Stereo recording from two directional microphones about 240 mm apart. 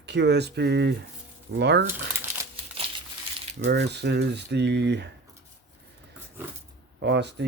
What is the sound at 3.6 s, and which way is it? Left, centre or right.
Speech, right.